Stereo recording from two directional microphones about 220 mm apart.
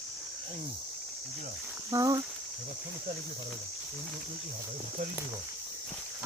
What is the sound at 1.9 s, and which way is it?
Speech, 15° right (ahead or behind).